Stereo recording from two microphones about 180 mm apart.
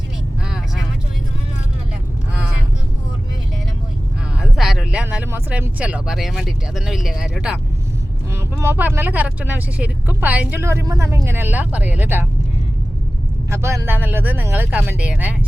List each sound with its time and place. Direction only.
4.4 s speech: centre (ahead or behind)
13.5 s speech: 15° right (ahead or behind)